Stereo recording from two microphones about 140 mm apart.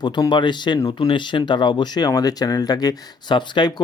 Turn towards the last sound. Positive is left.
turn(degrees=30)  # may be behind; listen again after turning